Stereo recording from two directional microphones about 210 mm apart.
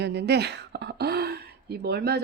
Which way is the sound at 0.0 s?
50° right (ahead or behind).